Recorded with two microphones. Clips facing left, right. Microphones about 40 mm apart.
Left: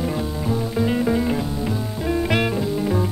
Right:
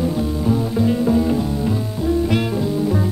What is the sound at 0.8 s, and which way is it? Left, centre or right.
Music, left.